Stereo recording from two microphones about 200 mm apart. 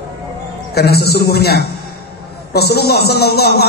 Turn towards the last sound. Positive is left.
turn(degrees=55)  # may be behind; listen again after turning